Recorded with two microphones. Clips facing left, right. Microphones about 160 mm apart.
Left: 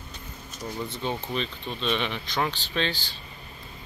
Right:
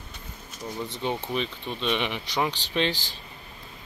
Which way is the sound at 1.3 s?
10° right (ahead or behind).